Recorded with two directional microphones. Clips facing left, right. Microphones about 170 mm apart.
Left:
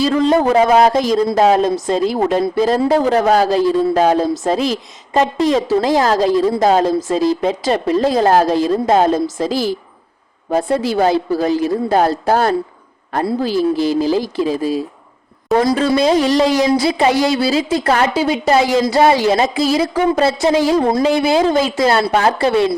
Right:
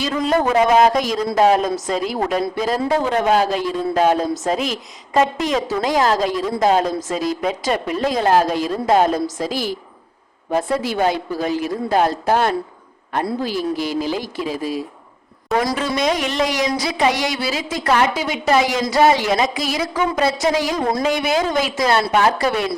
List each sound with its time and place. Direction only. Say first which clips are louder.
0.0 s a woman's voice: left 5 dB; 30° left (ahead or behind)